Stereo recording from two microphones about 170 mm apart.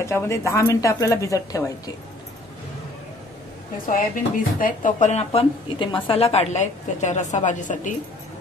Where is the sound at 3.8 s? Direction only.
55° left (ahead or behind).